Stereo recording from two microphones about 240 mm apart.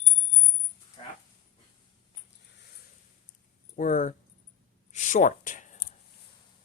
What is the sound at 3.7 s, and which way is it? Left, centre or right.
Speech, left.